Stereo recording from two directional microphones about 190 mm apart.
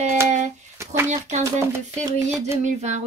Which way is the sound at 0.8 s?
15° right (ahead or behind).